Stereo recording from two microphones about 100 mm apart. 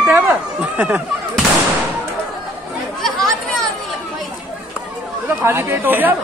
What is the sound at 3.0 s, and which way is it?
Chatter, 5° left (ahead or behind).